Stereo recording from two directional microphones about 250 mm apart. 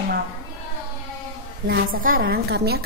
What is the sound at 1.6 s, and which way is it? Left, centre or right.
A woman's voice, right.